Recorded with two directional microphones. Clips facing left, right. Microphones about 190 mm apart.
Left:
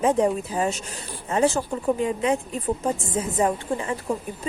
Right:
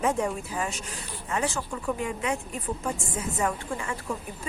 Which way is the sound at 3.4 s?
30° left (ahead or behind).